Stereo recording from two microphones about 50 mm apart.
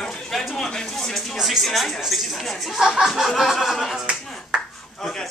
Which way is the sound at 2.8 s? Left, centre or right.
Centre.